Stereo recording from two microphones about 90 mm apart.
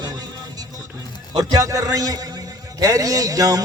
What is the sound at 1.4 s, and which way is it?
Music, 45° right (ahead or behind).